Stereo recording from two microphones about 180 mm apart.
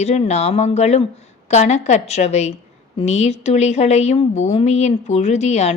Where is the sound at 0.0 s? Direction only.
35° left (ahead or behind).